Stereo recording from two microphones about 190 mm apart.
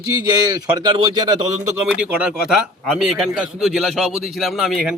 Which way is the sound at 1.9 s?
5° right (ahead or behind).